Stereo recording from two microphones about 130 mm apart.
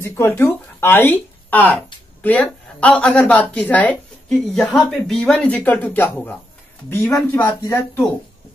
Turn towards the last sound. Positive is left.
turn(degrees=20)  # may be behind; listen again after turning